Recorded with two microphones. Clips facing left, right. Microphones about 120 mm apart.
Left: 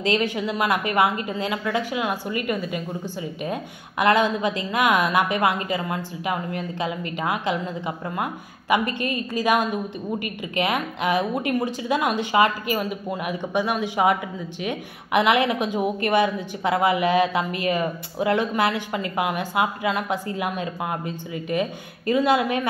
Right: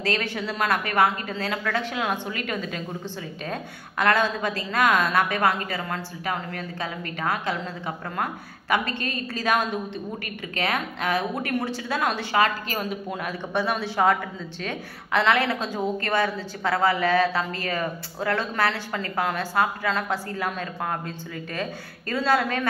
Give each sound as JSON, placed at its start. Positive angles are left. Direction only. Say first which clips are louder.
{"t": 0.0, "sound": "a woman's voice", "louder": "left 4 dB", "side_deg": 15}
{"t": 4.0, "sound": "a woman's voice", "louder": "left 3 dB", "side_deg": 15}